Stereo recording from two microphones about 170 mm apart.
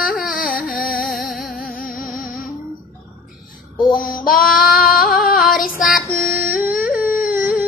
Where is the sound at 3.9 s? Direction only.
55° left (ahead or behind).